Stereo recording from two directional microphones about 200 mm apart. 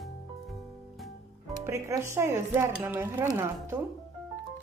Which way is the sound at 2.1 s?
15° right (ahead or behind).